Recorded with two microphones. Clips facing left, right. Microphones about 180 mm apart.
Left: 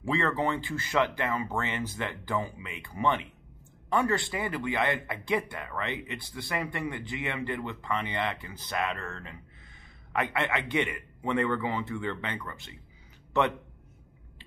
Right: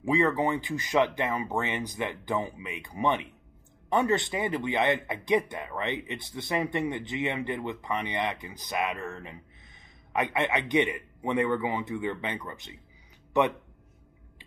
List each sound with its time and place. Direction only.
0.0 s speech: 15° right (ahead or behind)